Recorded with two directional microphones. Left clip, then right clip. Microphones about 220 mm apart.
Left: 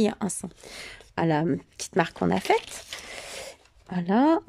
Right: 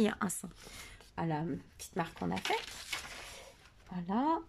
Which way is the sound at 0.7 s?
40° left (ahead or behind).